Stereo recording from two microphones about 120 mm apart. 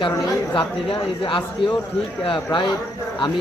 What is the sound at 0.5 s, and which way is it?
Speech, 45° left (ahead or behind).